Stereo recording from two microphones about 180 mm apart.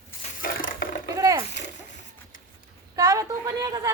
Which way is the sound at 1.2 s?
20° right (ahead or behind).